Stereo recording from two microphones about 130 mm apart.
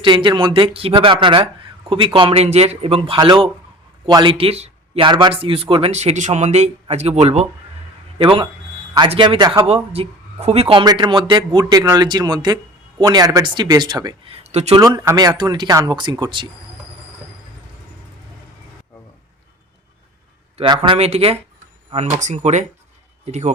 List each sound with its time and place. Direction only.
0.0 s speech: 40° right (ahead or behind)
2.4 s a man's voice: 55° right (ahead or behind)
5.0 s speech: 35° right (ahead or behind)
5.3 s a man's voice: 45° right (ahead or behind)
5.9 s speech: 60° right (ahead or behind)
8.2 s a man's voice: 45° right (ahead or behind)
10.8 s speech: 35° right (ahead or behind)
11.6 s speech: 25° right (ahead or behind)
14.3 s speech: 55° right (ahead or behind)
14.8 s speech: 25° right (ahead or behind)
20.7 s a man's voice: 40° right (ahead or behind); by 23.5 s 55° right (ahead or behind)